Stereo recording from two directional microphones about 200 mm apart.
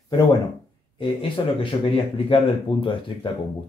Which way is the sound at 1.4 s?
20° left (ahead or behind).